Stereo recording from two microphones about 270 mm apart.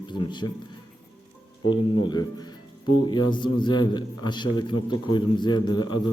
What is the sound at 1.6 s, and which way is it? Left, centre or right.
A man's voice, centre.